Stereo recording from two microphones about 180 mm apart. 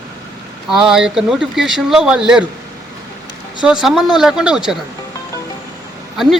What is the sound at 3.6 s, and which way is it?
Speech, 5° right (ahead or behind).